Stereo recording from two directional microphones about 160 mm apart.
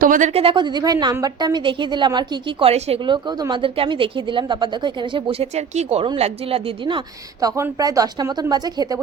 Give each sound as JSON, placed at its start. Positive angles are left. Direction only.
{"t": 0.0, "sound": "a woman's voice", "side_deg": -55}
{"t": 3.0, "sound": "speech", "side_deg": -30}
{"t": 7.4, "sound": "a woman's voice", "side_deg": -20}